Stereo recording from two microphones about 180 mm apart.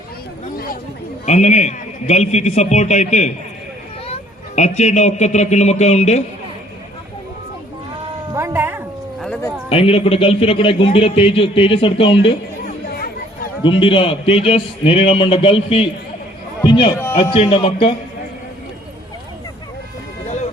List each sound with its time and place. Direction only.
1.2 s a man's voice: 40° left (ahead or behind)
8.3 s music: 15° right (ahead or behind)
9.6 s a man's voice: 30° left (ahead or behind)
13.7 s a man's voice: 30° left (ahead or behind)
20.2 s a sound: 40° left (ahead or behind)